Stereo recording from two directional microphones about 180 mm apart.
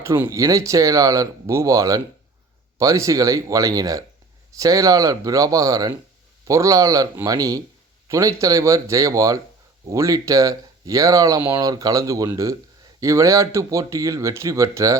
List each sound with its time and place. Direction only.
0.0 s speech: 15° right (ahead or behind)